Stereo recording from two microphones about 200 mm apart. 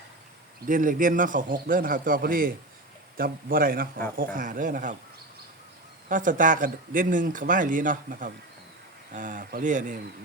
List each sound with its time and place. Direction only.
0.7 s a man's voice: 40° right (ahead or behind)
6.1 s speech: 40° right (ahead or behind)